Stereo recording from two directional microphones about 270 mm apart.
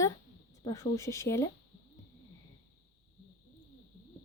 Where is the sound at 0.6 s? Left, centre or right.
Centre.